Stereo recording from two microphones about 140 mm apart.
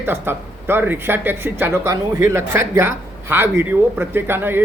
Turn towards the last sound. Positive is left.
turn(degrees=-15)  # may be behind; listen again after turning